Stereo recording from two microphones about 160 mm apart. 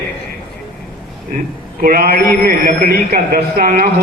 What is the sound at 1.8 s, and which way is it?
A man's voice, 65° right (ahead or behind).